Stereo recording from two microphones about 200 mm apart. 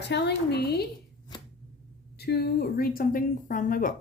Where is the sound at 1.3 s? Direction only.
20° left (ahead or behind).